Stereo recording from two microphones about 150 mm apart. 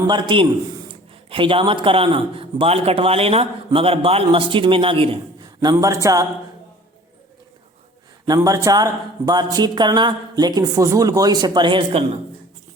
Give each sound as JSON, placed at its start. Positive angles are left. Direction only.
{"t": 0.1, "sound": "speech", "side_deg": -30}
{"t": 5.7, "sound": "speech", "side_deg": -20}
{"t": 8.3, "sound": "speech", "side_deg": -25}